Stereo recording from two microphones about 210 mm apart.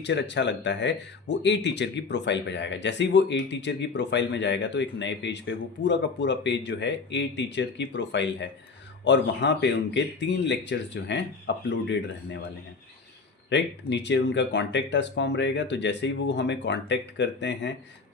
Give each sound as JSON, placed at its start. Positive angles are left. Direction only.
{"t": 0.0, "sound": "speech", "side_deg": 55}
{"t": 13.5, "sound": "speech", "side_deg": 55}